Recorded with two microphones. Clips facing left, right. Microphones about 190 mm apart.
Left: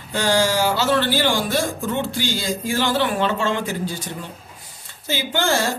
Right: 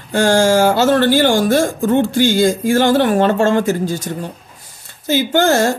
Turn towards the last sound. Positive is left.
turn(degrees=-45)  # may be behind; listen again after turning